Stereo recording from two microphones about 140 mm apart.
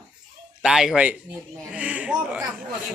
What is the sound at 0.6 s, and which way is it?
Speech, 5° right (ahead or behind).